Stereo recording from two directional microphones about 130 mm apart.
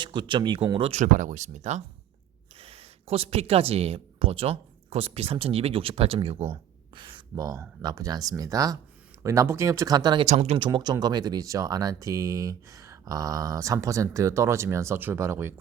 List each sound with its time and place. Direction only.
0.0 s speech: 35° right (ahead or behind)
0.7 s speech: 50° right (ahead or behind)
1.0 s speech: 80° right
2.6 s speech: 50° right (ahead or behind); by 10.2 s 35° right (ahead or behind)
10.2 s speech: 60° right (ahead or behind)
10.7 s speech: 30° right (ahead or behind)